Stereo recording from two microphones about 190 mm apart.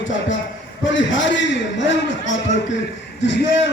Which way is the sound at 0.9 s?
75° left (ahead or behind).